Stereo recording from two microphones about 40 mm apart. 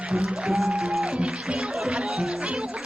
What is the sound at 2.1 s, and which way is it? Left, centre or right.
Music, centre.